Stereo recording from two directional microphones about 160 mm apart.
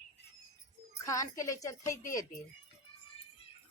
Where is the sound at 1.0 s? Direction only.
20° left (ahead or behind).